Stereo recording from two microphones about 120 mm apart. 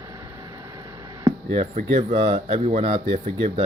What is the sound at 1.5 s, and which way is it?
Speech, 60° right (ahead or behind).